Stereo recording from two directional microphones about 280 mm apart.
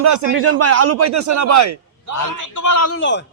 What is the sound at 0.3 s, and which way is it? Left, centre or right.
A man's voice, right.